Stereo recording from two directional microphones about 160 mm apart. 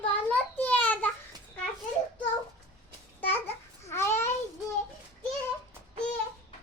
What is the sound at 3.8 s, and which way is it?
Babbling, 15° left (ahead or behind).